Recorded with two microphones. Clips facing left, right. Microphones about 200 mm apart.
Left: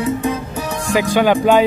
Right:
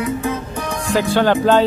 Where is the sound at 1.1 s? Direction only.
10° left (ahead or behind).